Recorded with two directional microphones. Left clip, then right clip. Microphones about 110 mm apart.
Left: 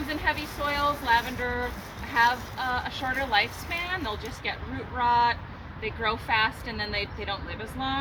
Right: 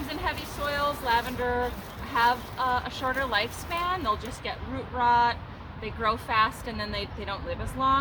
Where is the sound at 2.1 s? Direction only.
40° right (ahead or behind).